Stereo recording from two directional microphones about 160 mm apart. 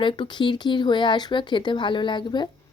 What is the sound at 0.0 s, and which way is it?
Speech, 30° left (ahead or behind).